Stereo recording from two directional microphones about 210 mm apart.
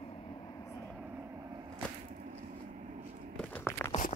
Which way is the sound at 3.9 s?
35° left (ahead or behind).